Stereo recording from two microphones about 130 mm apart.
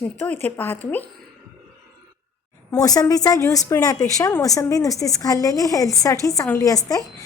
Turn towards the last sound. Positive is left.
turn(degrees=25)  # may be behind; listen again after turning